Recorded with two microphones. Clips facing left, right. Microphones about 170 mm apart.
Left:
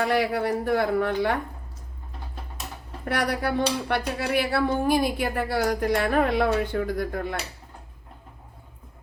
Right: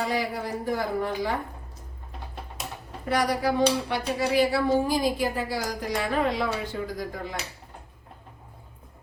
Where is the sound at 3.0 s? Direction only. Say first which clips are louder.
Right 1 dB; 60° left (ahead or behind).